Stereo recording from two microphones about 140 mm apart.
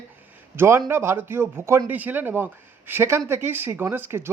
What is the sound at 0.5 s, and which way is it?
Speech, 20° right (ahead or behind).